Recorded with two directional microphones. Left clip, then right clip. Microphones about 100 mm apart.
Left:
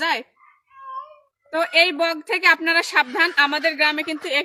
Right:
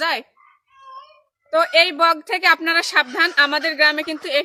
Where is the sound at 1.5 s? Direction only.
35° right (ahead or behind).